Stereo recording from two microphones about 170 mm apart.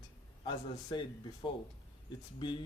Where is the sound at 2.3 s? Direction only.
25° left (ahead or behind).